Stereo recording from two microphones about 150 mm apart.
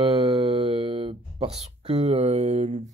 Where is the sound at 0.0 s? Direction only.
40° right (ahead or behind).